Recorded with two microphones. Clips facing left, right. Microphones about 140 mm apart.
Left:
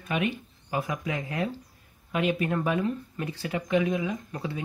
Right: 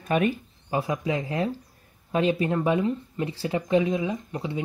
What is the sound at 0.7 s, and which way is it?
Speech, 30° right (ahead or behind).